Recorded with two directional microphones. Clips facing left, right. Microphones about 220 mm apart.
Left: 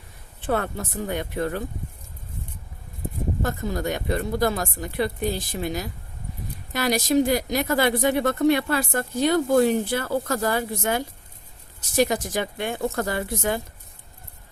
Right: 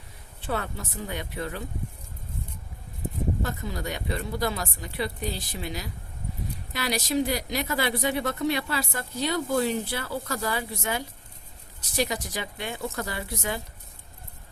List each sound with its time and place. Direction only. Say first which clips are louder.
0.4 s speech: left 6 dB; 50° left (ahead or behind)
3.4 s speech: left 6 dB; 45° left (ahead or behind)